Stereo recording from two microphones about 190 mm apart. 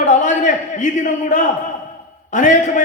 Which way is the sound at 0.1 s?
40° left (ahead or behind).